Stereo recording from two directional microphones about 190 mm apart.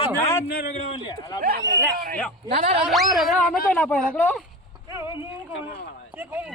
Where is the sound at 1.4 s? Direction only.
50° right (ahead or behind).